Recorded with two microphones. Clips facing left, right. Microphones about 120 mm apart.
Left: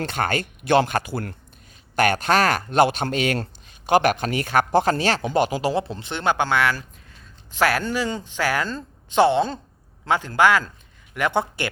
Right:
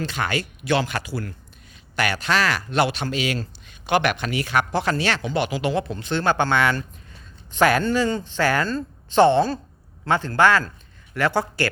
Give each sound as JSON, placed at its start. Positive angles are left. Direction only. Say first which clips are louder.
{"t": 0.0, "sound": "speech", "louder": "left 1 dB", "side_deg": 50}
{"t": 3.7, "sound": "speech", "louder": "left 3 dB", "side_deg": 40}